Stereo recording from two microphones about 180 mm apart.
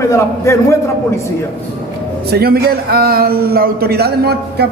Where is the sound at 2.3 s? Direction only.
60° right (ahead or behind).